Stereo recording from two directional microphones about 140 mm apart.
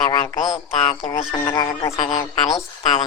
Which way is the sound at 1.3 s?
35° left (ahead or behind).